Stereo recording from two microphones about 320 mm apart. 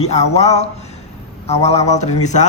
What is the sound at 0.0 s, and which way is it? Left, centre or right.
A man's voice, left.